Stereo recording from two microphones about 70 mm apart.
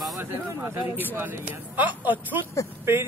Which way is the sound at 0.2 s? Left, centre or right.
Right.